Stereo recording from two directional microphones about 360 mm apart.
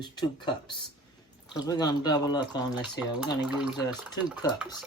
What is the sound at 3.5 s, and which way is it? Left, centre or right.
Speech, centre.